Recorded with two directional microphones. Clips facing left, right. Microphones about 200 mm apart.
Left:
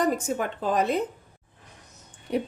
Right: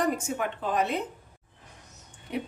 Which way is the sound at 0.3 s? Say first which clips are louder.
Left 3 dB; 40° left (ahead or behind).